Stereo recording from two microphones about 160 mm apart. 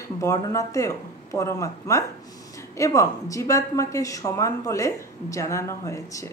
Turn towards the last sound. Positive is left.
turn(degrees=20)  # may be behind; listen again after turning